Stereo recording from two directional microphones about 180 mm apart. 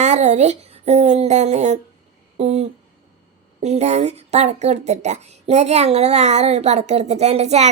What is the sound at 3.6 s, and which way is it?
Speech, 40° right (ahead or behind).